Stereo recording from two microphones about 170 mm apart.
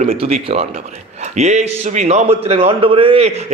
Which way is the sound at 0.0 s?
35° right (ahead or behind).